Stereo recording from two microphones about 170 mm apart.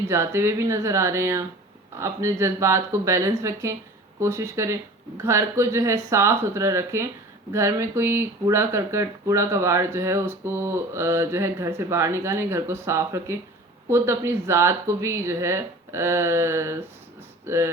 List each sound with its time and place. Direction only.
0.1 s speech: 15° right (ahead or behind)